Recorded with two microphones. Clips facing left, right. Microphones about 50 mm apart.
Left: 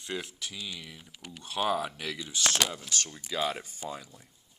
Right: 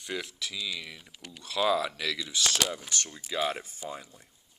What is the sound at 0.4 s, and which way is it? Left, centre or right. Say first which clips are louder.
Speech: right 4 dB; right.